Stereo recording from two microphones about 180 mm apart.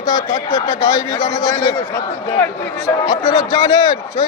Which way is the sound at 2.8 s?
20° left (ahead or behind).